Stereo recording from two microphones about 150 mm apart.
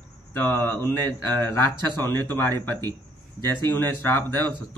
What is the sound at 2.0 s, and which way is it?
Speech, 15° left (ahead or behind).